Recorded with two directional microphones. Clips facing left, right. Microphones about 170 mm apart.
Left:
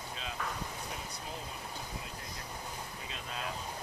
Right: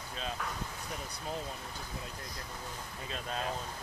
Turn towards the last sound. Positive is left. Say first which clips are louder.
# right 4 dB
turn(degrees=-40)  # may be behind; listen again after turning